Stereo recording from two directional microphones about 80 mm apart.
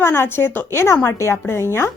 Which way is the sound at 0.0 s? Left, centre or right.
Left.